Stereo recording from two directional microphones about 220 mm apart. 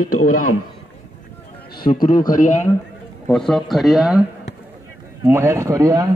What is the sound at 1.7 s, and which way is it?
Speech, 40° left (ahead or behind).